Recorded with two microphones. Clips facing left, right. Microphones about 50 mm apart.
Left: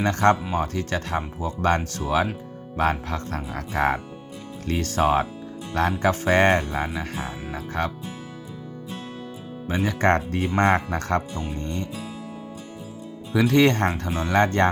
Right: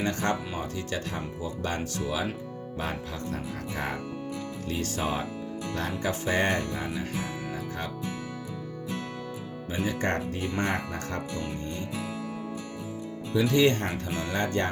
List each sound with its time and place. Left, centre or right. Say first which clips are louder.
0.0 s speech: left 8 dB; left
5.7 s music: left 10 dB; left
6.1 s speech: left 7 dB; left
6.9 s speech: left 2 dB; left
9.6 s speech: left 8 dB; left
13.3 s speech: left 4 dB; left
14.1 s speech: left 5 dB; left
14.3 s speech: left 9 dB; left